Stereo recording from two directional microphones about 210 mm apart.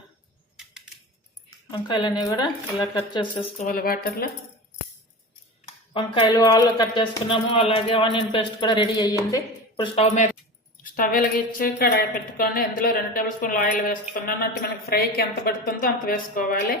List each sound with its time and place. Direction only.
1.7 s speech: 20° left (ahead or behind)
3.7 s speech: 45° left (ahead or behind)
5.6 s a sound: 25° left (ahead or behind)
6.2 s speech: 15° left (ahead or behind)
10.9 s speech: 40° left (ahead or behind)